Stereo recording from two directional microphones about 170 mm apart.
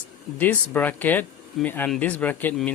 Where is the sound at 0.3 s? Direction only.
10° left (ahead or behind).